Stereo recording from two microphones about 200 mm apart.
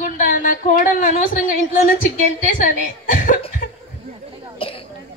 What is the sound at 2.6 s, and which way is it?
Speech, 40° left (ahead or behind).